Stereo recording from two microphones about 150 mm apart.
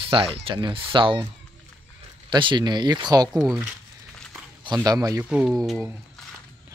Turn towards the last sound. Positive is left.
turn(degrees=0)  # may be behind; listen again after turning